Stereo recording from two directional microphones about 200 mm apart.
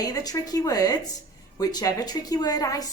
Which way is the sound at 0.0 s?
20° left (ahead or behind).